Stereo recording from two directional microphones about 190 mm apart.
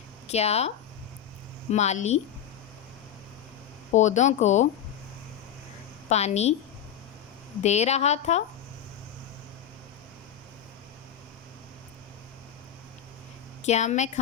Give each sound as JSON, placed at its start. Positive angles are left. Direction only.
{"t": 0.3, "sound": "a woman's voice", "side_deg": 35}
{"t": 1.7, "sound": "a woman's voice", "side_deg": 35}
{"t": 3.9, "sound": "a woman's voice", "side_deg": 40}
{"t": 6.1, "sound": "a woman's voice", "side_deg": 35}
{"t": 7.6, "sound": "a woman's voice", "side_deg": 35}
{"t": 13.7, "sound": "a woman's voice", "side_deg": 35}